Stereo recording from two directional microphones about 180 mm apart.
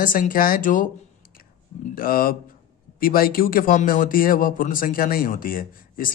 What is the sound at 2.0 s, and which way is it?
Speech, 55° left (ahead or behind).